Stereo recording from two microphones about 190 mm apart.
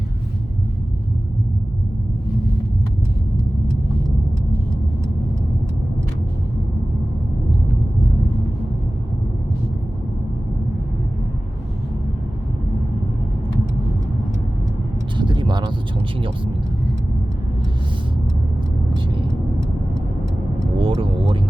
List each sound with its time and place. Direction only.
15.2 s vehicle: 25° right (ahead or behind)
18.9 s vehicle: 25° right (ahead or behind)
20.7 s vehicle: 30° right (ahead or behind)